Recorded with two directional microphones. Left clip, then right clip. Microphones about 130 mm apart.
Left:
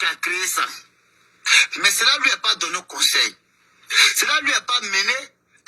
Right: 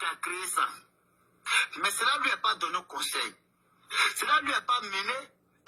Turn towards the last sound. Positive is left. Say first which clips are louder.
# left 8 dB
turn(degrees=25)  # may be behind; listen again after turning